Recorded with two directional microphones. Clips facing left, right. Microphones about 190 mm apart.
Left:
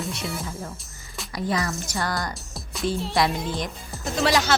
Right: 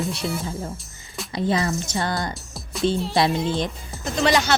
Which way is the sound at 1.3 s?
25° right (ahead or behind).